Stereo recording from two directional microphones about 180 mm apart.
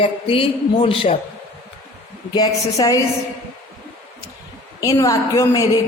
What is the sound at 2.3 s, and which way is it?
Speech, 20° left (ahead or behind).